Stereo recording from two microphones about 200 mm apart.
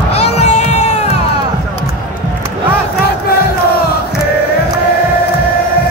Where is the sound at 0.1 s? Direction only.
30° left (ahead or behind).